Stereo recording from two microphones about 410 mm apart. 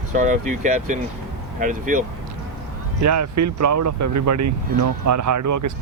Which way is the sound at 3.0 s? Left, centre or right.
Right.